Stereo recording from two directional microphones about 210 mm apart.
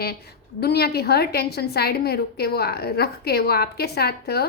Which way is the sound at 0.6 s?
50° left (ahead or behind).